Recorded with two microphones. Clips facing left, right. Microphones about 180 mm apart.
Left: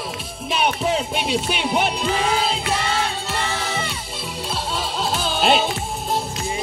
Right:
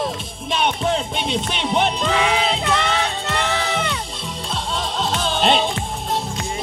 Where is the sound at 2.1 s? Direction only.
80° right.